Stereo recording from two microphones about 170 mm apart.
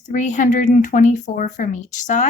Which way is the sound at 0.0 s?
45° left (ahead or behind).